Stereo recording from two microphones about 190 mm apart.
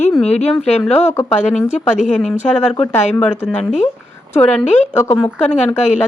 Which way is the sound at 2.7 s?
5° left (ahead or behind).